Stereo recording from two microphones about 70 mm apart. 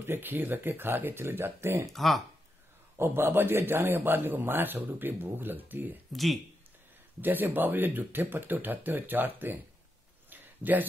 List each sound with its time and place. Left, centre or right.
0.0 s speech: right
1.9 s speech: centre
3.0 s a man's voice: right
6.1 s speech: centre
7.2 s a man's voice: right
10.3 s a sound: right